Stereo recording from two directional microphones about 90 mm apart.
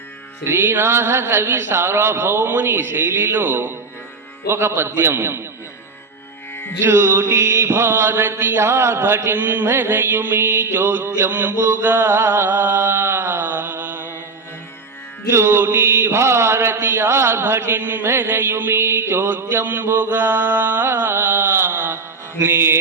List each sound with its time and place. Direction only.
0.4 s mantra: 25° right (ahead or behind)
6.8 s mantra: 25° right (ahead or behind)
15.3 s mantra: 30° right (ahead or behind)